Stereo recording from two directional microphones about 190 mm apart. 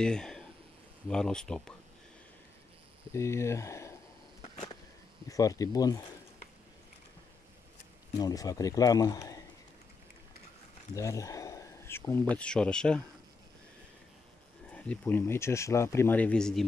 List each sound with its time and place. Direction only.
0.0 s speech: 5° left (ahead or behind)
3.1 s speech: 15° left (ahead or behind)
4.4 s a sound: 30° left (ahead or behind)
5.3 s speech: 20° left (ahead or behind)
8.2 s speech: 20° left (ahead or behind)
11.0 s speech: 15° left (ahead or behind)
14.7 s speech: 5° left (ahead or behind)